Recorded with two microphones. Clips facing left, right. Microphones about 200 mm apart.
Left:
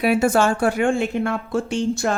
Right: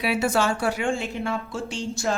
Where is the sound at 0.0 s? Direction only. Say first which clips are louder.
Left 6 dB; 50° left (ahead or behind).